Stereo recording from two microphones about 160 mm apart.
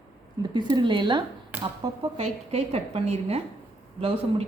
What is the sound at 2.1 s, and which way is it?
A woman's voice, 40° right (ahead or behind).